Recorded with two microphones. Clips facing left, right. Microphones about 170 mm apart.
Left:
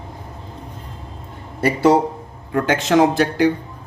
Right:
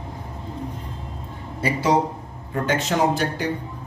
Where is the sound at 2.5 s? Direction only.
90° left.